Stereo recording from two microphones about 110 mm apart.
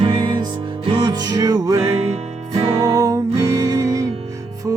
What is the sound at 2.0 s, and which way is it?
Music, 70° right (ahead or behind).